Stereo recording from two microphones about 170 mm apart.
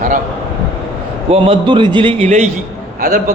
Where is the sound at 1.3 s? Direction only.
30° right (ahead or behind).